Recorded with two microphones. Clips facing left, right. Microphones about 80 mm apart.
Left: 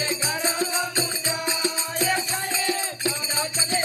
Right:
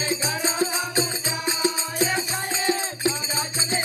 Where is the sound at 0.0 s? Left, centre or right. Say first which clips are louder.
Right 1 dB; right.